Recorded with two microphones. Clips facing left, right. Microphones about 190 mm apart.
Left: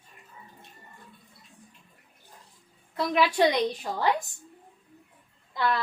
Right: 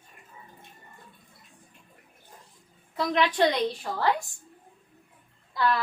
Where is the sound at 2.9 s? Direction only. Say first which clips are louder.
Left 1 dB; 5° left (ahead or behind).